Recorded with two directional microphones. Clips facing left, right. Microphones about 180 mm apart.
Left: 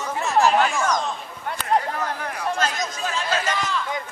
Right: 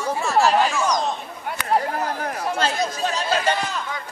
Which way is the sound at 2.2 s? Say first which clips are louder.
Right 3 dB; 40° right (ahead or behind).